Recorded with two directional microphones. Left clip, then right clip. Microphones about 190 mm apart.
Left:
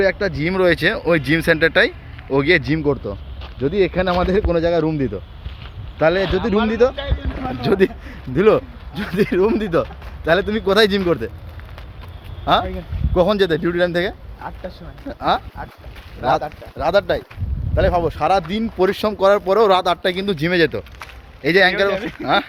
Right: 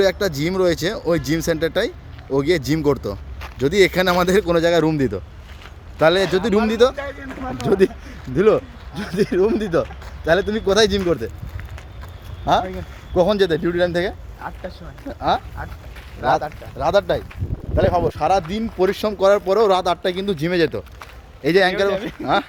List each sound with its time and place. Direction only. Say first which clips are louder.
0.0 s speech: even; 15° right (ahead or behind)
3.4 s speech: right 2 dB; 35° right (ahead or behind)
4.3 s a man's voice: right 1 dB; 15° right (ahead or behind); by 11.3 s centre (ahead or behind)
12.5 s a man's voice: left 1 dB; 5° right (ahead or behind)
18.0 s a man's voice: left 1 dB; centre (ahead or behind)
21.4 s a man's voice: left 2 dB; 20° right (ahead or behind)